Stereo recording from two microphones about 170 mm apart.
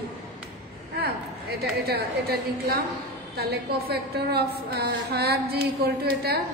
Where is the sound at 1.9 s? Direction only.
65° right (ahead or behind).